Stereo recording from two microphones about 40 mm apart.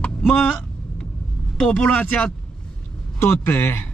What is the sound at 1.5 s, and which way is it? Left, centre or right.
Speech, left.